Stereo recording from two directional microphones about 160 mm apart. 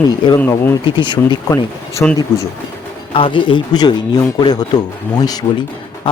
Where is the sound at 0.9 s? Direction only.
30° left (ahead or behind).